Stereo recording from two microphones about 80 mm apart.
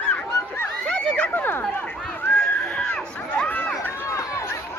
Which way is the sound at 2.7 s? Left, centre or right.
Centre.